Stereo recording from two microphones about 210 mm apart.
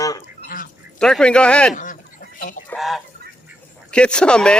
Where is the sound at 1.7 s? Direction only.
35° left (ahead or behind).